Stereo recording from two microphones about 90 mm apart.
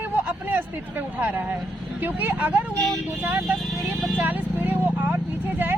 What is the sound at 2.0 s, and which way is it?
Speech, 20° right (ahead or behind).